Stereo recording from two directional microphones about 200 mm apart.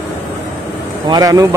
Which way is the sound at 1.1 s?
15° right (ahead or behind).